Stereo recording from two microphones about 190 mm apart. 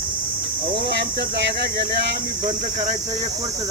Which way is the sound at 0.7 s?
55° right (ahead or behind).